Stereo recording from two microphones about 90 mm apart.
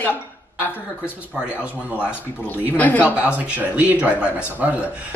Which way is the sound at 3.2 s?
15° right (ahead or behind).